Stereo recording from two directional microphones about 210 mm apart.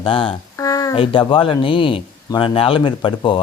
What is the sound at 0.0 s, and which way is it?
A child's voice, 25° left (ahead or behind).